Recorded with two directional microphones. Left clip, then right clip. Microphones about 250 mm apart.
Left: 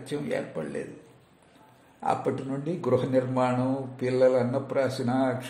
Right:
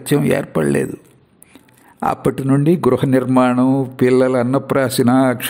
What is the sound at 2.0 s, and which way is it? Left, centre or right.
Speech, right.